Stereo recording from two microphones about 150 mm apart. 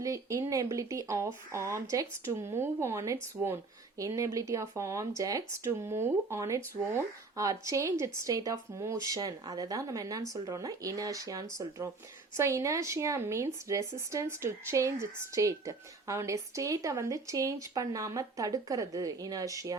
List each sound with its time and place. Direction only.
0.0 s speech: 20° right (ahead or behind)